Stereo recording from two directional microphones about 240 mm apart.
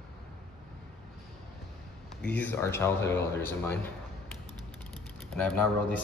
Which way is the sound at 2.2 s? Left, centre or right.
Centre.